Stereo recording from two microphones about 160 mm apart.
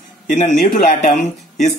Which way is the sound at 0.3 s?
45° left (ahead or behind).